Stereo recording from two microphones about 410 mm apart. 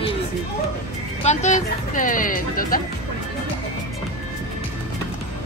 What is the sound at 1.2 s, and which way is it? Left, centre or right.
Speech, centre.